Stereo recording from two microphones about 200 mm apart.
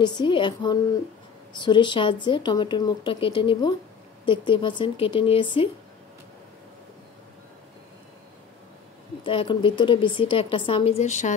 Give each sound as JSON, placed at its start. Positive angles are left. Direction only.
{"t": 0.0, "sound": "speech", "side_deg": 20}
{"t": 9.2, "sound": "speech", "side_deg": 25}